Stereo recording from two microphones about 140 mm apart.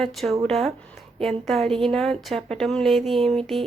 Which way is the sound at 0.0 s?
Centre (ahead or behind).